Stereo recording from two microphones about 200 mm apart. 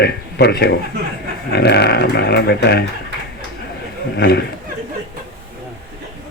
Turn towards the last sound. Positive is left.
turn(degrees=50)  # may be behind; listen again after turning